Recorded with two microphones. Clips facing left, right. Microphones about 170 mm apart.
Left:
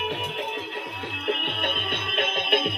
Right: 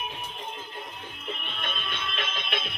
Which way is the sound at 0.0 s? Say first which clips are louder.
Left 8 dB; 70° left (ahead or behind).